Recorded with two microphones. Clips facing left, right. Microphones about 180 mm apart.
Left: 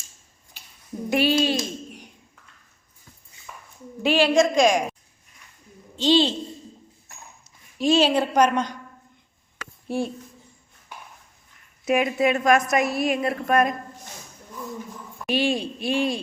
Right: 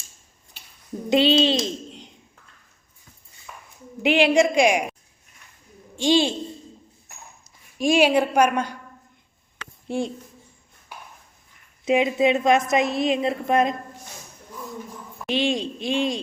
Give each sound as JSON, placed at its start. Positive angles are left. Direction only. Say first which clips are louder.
{"t": 1.1, "sound": "a child's voice", "louder": "right 3 dB", "side_deg": -20}
{"t": 4.0, "sound": "a woman's voice", "louder": "right 1 dB", "side_deg": -15}
{"t": 6.0, "sound": "a woman's voice", "louder": "even", "side_deg": -10}
{"t": 7.8, "sound": "a woman's voice", "louder": "right 1 dB", "side_deg": -10}
{"t": 9.9, "sound": "a woman's voice", "louder": "even", "side_deg": -15}
{"t": 11.9, "sound": "a woman's voice", "louder": "right 2 dB", "side_deg": -20}
{"t": 15.3, "sound": "a woman's voice", "louder": "even", "side_deg": -20}